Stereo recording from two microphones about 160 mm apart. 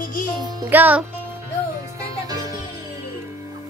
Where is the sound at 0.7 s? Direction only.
10° right (ahead or behind).